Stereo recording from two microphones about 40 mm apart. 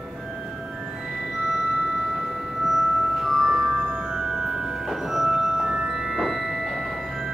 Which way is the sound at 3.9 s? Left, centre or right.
Right.